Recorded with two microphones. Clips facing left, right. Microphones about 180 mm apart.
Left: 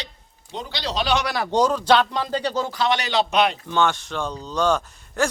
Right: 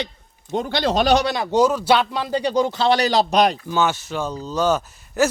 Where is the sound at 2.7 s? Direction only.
30° right (ahead or behind).